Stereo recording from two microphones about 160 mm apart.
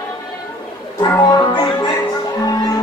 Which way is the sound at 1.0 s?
15° left (ahead or behind).